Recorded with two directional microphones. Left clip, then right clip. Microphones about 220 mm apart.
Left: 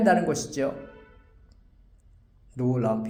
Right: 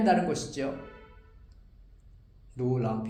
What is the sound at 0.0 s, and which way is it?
Speech, 40° left (ahead or behind).